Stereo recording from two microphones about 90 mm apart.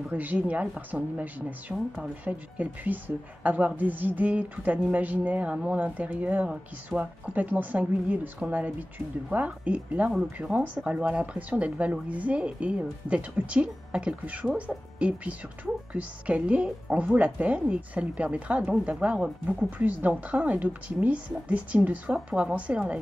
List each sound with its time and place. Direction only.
0.1 s speech: 20° right (ahead or behind)